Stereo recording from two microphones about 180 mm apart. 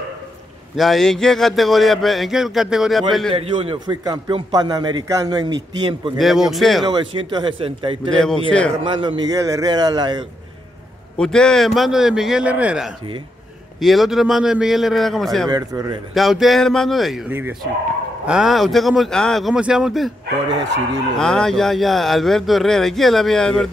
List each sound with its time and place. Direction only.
0.7 s speech: centre (ahead or behind)
3.3 s a man's voice: 30° right (ahead or behind)
6.1 s speech: centre (ahead or behind)
6.9 s a man's voice: 25° right (ahead or behind)
8.1 s speech: 5° left (ahead or behind)
8.8 s a man's voice: 25° right (ahead or behind)
11.1 s speech: 5° left (ahead or behind)
15.5 s a man's voice: 20° right (ahead or behind)
16.2 s speech: centre (ahead or behind)
21.2 s speech: 5° left (ahead or behind)